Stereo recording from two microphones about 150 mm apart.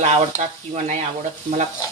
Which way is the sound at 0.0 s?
50° right (ahead or behind).